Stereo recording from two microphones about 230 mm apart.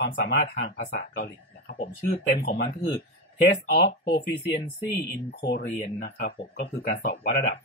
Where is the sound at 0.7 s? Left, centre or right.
Left.